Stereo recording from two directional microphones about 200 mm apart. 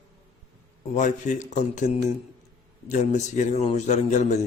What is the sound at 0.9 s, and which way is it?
A man's voice, 35° left (ahead or behind).